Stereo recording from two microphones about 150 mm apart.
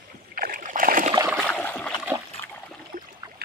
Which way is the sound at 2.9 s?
65° right (ahead or behind).